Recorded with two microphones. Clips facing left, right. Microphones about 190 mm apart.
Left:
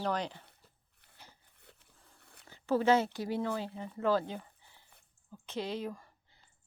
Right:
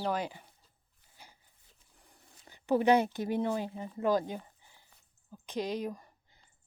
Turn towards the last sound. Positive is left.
turn(degrees=-15)  # may be behind; listen again after turning